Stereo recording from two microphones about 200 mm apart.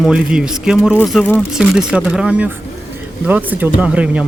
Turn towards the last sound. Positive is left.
turn(degrees=-5)  # may be behind; listen again after turning